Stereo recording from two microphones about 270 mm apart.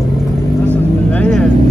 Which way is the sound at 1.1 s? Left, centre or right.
Centre.